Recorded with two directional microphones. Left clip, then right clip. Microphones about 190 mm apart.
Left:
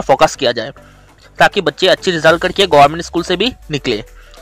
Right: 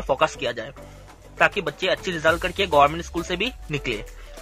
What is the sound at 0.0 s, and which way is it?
Speech, 35° left (ahead or behind).